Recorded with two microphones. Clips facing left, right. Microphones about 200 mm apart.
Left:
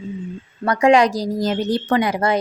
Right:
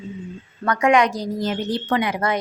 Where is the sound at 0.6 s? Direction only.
30° left (ahead or behind).